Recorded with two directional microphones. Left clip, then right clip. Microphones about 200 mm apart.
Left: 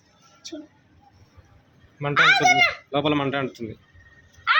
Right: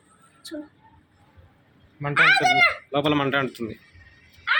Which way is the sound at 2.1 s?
15° right (ahead or behind).